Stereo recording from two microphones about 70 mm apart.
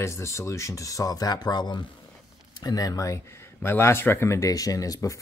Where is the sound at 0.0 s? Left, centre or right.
Left.